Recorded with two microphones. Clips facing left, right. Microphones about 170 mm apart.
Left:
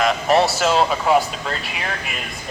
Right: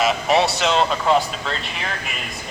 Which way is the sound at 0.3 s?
Centre (ahead or behind).